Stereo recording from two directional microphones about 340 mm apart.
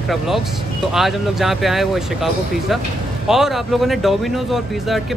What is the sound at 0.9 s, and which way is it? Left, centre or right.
Speech, centre.